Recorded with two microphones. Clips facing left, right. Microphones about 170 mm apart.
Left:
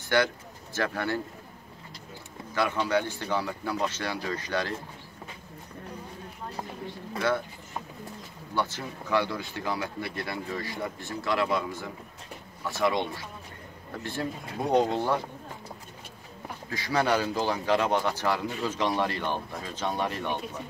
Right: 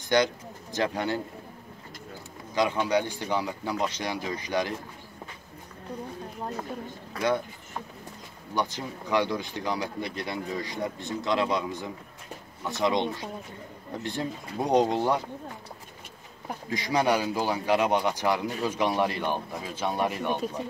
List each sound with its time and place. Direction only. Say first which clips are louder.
0.1 s speech: right 2 dB; 20° right (ahead or behind)
2.5 s speech: right 2 dB; 15° right (ahead or behind)
8.5 s speech: right 1 dB; 15° right (ahead or behind)
16.6 s speech: right 2 dB; 15° right (ahead or behind)